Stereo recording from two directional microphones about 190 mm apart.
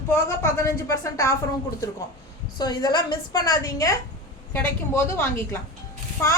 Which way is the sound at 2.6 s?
20° left (ahead or behind).